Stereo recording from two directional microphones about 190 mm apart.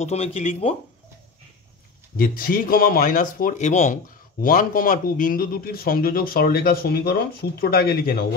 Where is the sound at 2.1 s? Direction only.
50° left (ahead or behind).